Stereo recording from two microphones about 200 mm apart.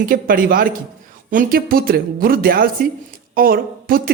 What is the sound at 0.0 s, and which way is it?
Speech, 45° right (ahead or behind).